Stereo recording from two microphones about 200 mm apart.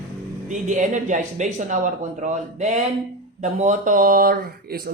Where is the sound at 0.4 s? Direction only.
40° right (ahead or behind).